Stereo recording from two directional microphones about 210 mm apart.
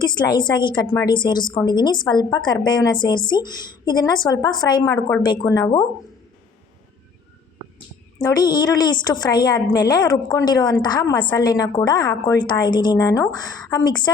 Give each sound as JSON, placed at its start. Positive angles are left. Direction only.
{"t": 0.0, "sound": "a woman's voice", "side_deg": 20}
{"t": 8.2, "sound": "a woman's voice", "side_deg": 20}